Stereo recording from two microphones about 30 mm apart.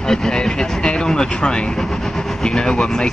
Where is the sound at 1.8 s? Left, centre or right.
Centre.